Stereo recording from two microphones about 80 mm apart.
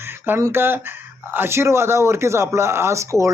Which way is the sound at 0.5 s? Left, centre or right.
Right.